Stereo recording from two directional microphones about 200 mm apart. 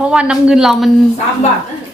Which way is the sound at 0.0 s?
5° right (ahead or behind).